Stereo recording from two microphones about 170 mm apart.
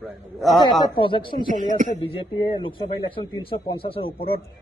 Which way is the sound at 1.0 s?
30° left (ahead or behind).